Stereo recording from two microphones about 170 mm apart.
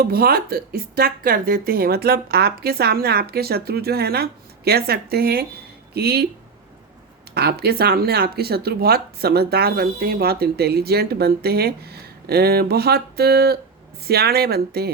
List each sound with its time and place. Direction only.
0.0 s speech: 65° right (ahead or behind)
7.3 s speech: 70° right (ahead or behind)